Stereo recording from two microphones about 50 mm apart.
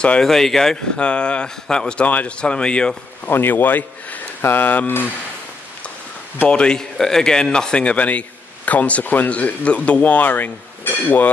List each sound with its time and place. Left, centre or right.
0.2 s speech: centre
0.9 s a man's voice: left
2.0 s speech: left
2.4 s a man's voice: centre
3.3 s speech: left
6.4 s a man's voice: centre; by 11.2 s left